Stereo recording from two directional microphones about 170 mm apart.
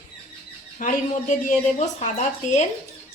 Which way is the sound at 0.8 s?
50° left (ahead or behind).